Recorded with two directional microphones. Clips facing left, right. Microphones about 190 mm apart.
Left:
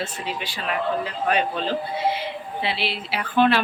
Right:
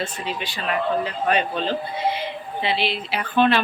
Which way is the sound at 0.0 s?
5° left (ahead or behind).